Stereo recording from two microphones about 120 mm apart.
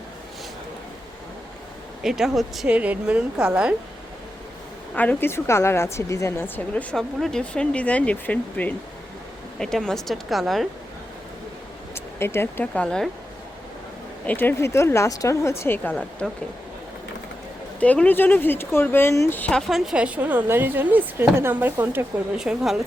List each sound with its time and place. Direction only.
2.0 s speech: 5° right (ahead or behind)
2.6 s a woman's voice: 10° right (ahead or behind)
4.9 s a woman's voice: 15° left (ahead or behind); by 10.7 s centre (ahead or behind)
11.9 s speech: 20° left (ahead or behind)
12.8 s speech: 5° left (ahead or behind)
14.3 s a woman's voice: 15° left (ahead or behind)
17.7 s speech: 10° left (ahead or behind); by 22.0 s 15° right (ahead or behind)
22.4 s speech: 5° right (ahead or behind)